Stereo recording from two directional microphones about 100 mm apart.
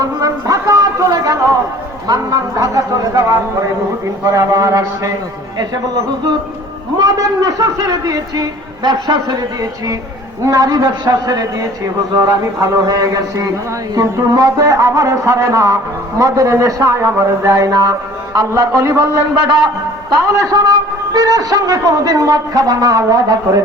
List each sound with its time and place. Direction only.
0.0 s a sound: 35° right (ahead or behind)
2.0 s a man's voice: 35° right (ahead or behind)
6.9 s a man's voice: 40° right (ahead or behind)
20.2 s a man's voice: 35° right (ahead or behind)